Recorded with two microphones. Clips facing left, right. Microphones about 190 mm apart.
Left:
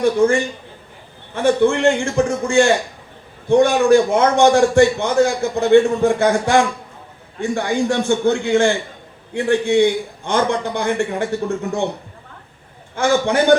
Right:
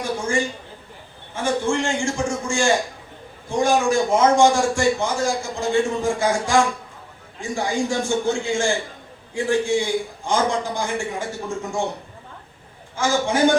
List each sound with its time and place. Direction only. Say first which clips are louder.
0.0 s a man's voice: left 8 dB; 60° left (ahead or behind)
13.0 s a man's voice: left 3 dB; 60° left (ahead or behind)